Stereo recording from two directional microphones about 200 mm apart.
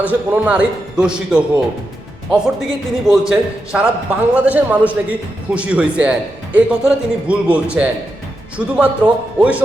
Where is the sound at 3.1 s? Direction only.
5° right (ahead or behind).